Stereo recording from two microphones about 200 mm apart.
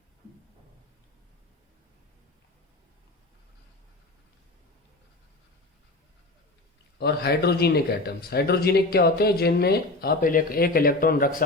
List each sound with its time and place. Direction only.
7.0 s speech: 55° left (ahead or behind)